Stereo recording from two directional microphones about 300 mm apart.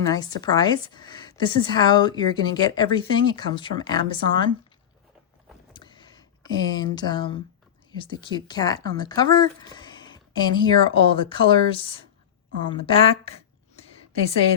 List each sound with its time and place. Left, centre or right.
0.0 s a woman's voice: centre
5.7 s a sound: centre
7.9 s a woman's voice: centre